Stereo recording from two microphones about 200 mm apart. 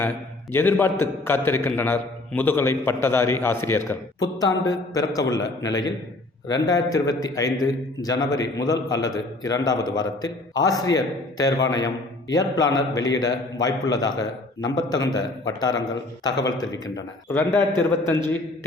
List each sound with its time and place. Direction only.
0.5 s a man's voice: 10° left (ahead or behind)